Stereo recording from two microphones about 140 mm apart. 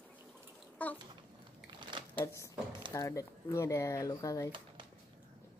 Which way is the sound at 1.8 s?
35° right (ahead or behind).